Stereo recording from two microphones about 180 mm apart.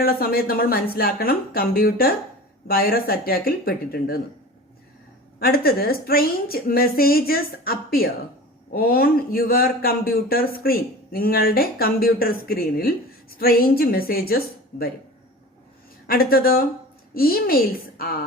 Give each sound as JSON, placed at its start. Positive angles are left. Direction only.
{"t": 0.0, "sound": "a man's voice", "side_deg": 55}
{"t": 5.4, "sound": "a man's voice", "side_deg": 55}
{"t": 16.0, "sound": "a man's voice", "side_deg": 55}